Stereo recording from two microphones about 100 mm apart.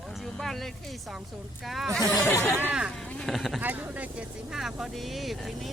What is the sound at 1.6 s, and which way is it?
Speech, centre (ahead or behind).